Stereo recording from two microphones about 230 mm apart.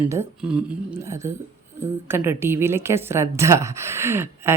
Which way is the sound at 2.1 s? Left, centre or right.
Centre.